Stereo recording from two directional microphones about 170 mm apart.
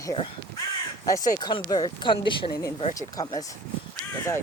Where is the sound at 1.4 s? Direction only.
25° left (ahead or behind).